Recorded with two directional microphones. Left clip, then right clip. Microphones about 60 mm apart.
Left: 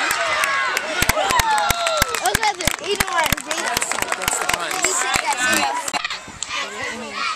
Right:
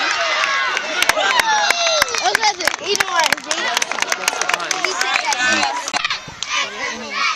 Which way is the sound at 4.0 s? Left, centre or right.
Right.